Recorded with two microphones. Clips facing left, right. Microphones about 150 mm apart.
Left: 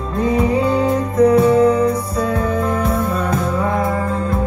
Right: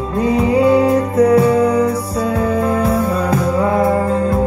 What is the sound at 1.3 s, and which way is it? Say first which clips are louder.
Music: even; 25° left (ahead or behind).